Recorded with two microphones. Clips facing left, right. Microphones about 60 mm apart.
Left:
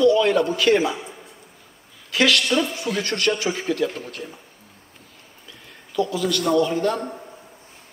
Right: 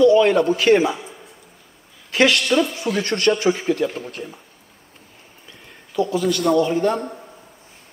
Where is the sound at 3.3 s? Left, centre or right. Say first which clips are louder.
Right 5 dB; centre.